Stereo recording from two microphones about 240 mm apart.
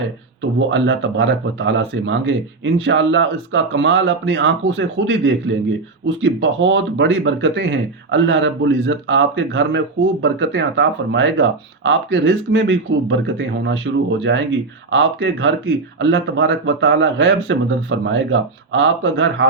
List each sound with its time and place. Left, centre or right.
0.7 s speech: right